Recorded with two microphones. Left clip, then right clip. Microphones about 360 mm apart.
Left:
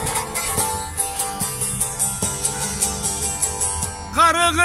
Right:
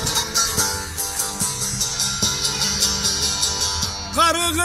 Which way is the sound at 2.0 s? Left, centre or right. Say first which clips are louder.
Right 6 dB; centre.